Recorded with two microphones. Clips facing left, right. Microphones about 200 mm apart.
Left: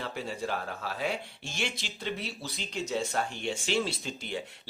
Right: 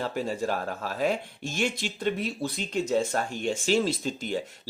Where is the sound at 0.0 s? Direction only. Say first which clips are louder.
Right 6 dB; 45° right (ahead or behind).